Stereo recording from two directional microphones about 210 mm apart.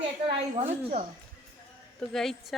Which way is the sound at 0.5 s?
30° right (ahead or behind).